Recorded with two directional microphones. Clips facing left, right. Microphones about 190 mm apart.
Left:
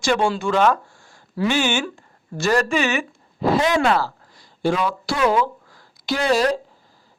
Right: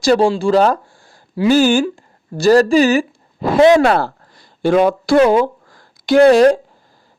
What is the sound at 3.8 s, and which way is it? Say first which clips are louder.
Speech: right 5 dB; 55° right (ahead or behind).